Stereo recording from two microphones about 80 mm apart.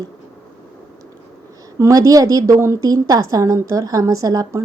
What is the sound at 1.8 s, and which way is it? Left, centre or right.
A woman's voice, right.